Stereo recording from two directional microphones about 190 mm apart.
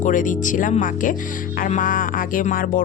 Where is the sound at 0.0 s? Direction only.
45° left (ahead or behind).